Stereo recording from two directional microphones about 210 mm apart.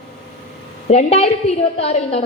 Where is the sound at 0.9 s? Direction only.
30° left (ahead or behind).